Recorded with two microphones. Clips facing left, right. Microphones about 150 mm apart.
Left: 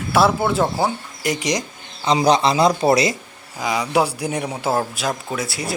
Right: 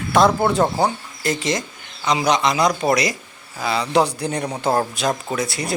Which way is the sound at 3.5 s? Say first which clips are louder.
Right 1 dB; 15° left (ahead or behind).